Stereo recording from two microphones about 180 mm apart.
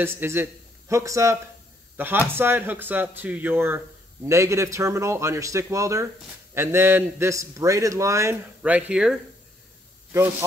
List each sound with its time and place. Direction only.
0.0 s a man's voice: 10° right (ahead or behind)